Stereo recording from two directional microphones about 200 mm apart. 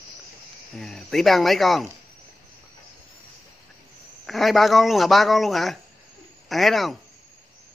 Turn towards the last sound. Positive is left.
turn(degrees=0)  # may be behind; listen again after turning